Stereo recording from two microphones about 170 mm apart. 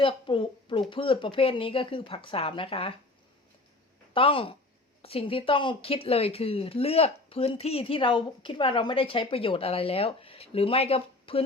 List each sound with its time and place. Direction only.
0.0 s speech: 30° left (ahead or behind)
4.1 s speech: 30° left (ahead or behind)